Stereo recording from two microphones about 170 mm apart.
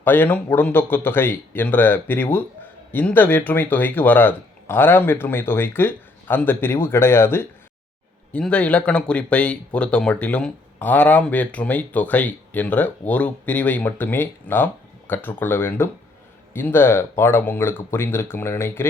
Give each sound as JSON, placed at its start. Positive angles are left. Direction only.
{"t": 0.0, "sound": "speech", "side_deg": 10}